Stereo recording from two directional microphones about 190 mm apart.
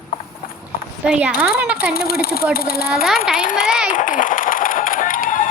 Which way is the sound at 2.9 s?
Centre (ahead or behind).